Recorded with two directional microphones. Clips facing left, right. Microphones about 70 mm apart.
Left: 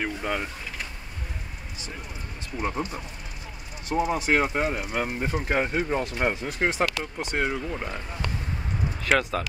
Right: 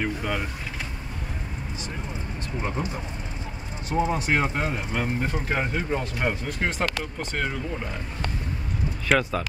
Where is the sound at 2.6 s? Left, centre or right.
Centre.